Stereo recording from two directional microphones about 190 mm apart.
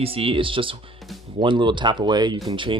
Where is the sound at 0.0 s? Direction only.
30° right (ahead or behind).